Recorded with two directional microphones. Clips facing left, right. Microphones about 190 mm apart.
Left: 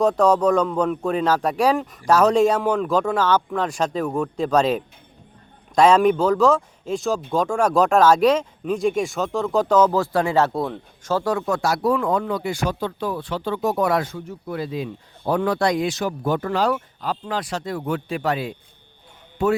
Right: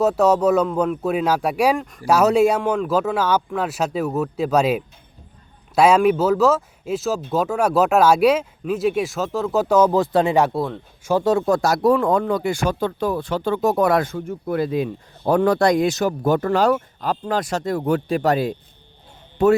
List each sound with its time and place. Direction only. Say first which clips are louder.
0.0 s speech: right 1 dB; 5° right (ahead or behind)
1.8 s speech: even; centre (ahead or behind); by 10.5 s 20° right (ahead or behind)
10.5 s speech: right 1 dB; centre (ahead or behind)
11.1 s speech: right 4 dB; 25° right (ahead or behind); by 19.5 s 40° right (ahead or behind)